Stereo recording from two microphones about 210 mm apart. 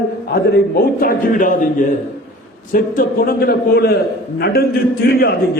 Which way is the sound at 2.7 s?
40° left (ahead or behind).